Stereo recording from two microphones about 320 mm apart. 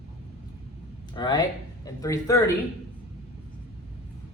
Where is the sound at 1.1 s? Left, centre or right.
Centre.